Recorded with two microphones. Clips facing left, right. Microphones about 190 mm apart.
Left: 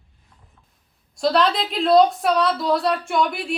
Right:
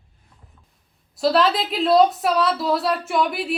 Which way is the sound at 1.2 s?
5° right (ahead or behind).